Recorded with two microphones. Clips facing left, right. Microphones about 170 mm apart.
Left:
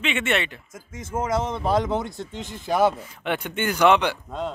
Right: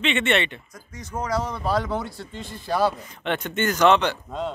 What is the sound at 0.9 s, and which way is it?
Speech, 25° left (ahead or behind).